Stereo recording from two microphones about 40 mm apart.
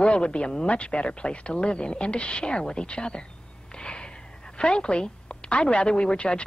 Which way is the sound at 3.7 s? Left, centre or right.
Left.